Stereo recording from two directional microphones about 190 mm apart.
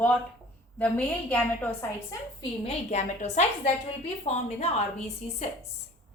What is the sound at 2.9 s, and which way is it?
A woman's voice, 35° left (ahead or behind).